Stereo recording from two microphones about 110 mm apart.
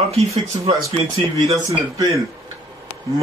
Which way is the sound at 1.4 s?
30° right (ahead or behind).